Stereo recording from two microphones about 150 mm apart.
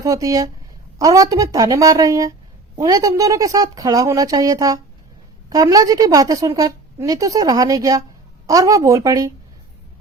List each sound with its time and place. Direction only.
0.0 s a woman's voice: 25° right (ahead or behind)